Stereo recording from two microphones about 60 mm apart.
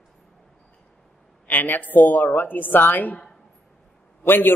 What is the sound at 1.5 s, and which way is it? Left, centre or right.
A man's voice, left.